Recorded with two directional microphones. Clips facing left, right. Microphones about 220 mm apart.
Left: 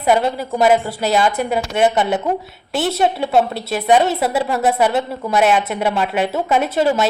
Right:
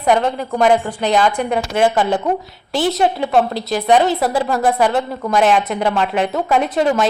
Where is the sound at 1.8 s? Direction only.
20° left (ahead or behind).